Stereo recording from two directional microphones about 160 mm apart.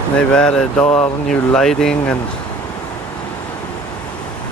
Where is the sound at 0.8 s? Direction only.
40° left (ahead or behind).